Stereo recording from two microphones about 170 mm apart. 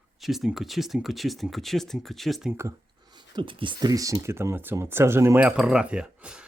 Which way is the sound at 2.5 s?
15° right (ahead or behind).